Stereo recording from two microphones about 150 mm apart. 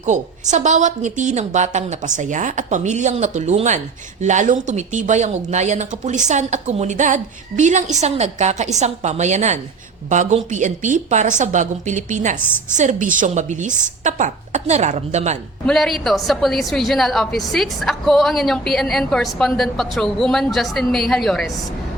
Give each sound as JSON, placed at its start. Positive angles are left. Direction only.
{"t": 0.0, "sound": "a woman's voice", "side_deg": -55}
{"t": 15.6, "sound": "a woman's voice", "side_deg": 0}